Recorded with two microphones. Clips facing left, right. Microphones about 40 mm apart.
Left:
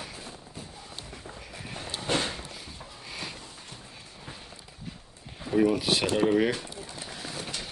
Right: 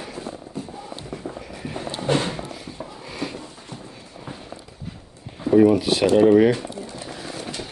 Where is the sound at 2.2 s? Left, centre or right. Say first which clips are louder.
Right 6 dB; right.